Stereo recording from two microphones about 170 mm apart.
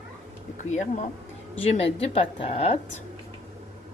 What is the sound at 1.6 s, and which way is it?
Speech, 35° left (ahead or behind).